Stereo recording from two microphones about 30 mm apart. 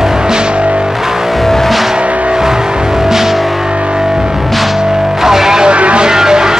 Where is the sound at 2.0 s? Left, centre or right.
Right.